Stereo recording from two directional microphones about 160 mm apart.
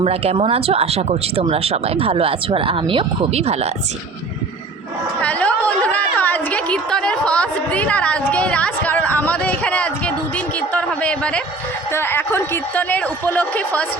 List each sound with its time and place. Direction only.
0.0 s speech: 40° right (ahead or behind)
5.2 s a woman's voice: 10° left (ahead or behind)